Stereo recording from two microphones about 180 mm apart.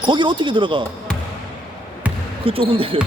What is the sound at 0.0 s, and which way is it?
Speech, 25° right (ahead or behind).